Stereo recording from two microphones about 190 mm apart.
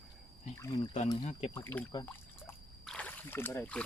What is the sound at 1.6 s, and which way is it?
Speech, 10° left (ahead or behind).